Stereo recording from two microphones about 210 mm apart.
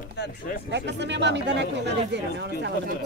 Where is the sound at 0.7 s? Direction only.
55° right (ahead or behind).